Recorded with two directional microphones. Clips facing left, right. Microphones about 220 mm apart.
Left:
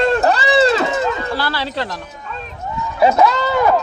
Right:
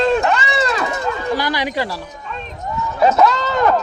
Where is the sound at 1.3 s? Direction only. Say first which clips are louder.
Right 2 dB; 15° right (ahead or behind).